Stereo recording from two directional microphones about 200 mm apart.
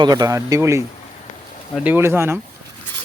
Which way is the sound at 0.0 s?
20° right (ahead or behind).